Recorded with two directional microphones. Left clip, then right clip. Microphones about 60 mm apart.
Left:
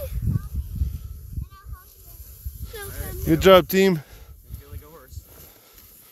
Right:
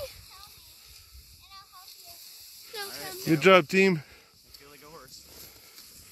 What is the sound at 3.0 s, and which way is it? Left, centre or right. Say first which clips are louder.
Speech: even; centre.